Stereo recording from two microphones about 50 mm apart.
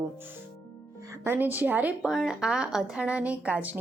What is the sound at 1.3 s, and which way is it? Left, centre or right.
Speech, right.